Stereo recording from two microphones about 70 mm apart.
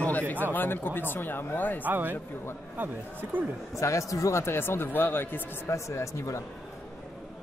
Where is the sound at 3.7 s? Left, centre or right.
Left.